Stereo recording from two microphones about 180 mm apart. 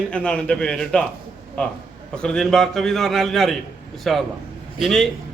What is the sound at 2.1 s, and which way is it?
A man's voice, 5° left (ahead or behind).